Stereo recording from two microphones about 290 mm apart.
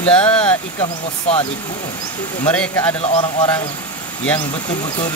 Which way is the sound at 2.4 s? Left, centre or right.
Centre.